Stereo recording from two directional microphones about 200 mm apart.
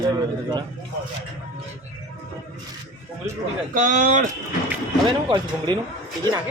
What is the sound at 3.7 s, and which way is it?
Speech, 40° right (ahead or behind).